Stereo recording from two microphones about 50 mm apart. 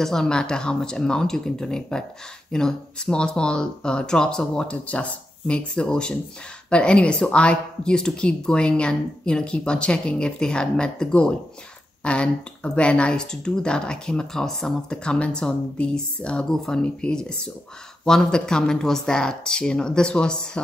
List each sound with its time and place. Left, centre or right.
0.0 s a woman's voice: centre
4.8 s a woman's voice: left